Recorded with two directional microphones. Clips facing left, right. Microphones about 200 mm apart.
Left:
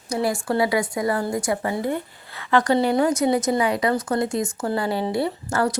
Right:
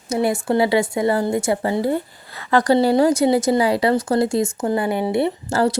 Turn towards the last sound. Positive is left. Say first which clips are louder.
# right 4 dB
turn(degrees=-25)  # may be behind; listen again after turning